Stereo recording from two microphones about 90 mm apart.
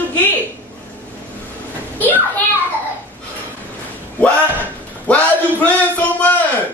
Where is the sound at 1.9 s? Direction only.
20° left (ahead or behind).